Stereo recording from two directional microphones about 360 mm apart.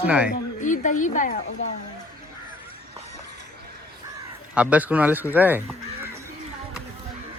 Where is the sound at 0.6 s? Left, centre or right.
Left.